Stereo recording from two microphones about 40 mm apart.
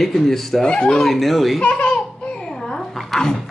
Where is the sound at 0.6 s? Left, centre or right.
Left.